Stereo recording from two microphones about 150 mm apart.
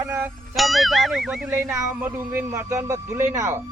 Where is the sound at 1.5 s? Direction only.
20° right (ahead or behind).